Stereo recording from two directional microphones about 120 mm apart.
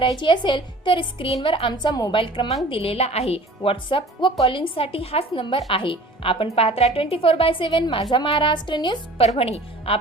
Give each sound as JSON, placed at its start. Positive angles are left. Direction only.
{"t": 0.2, "sound": "a woman's voice", "side_deg": 40}
{"t": 2.1, "sound": "speech", "side_deg": 45}
{"t": 9.1, "sound": "a woman's voice", "side_deg": 55}